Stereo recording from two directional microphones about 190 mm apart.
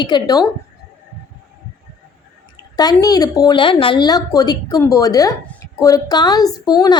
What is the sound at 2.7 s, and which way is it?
A woman's voice, 20° left (ahead or behind).